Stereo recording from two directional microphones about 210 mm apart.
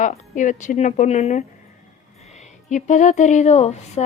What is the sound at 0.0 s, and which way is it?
Speech, 35° left (ahead or behind).